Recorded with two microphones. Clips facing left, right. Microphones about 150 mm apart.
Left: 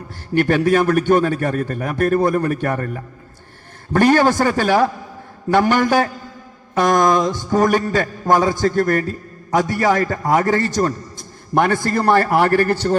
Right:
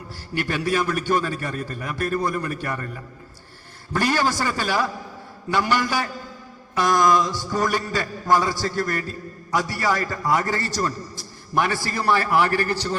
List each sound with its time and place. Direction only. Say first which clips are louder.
0.3 s a man's voice: left 8 dB; 55° left (ahead or behind)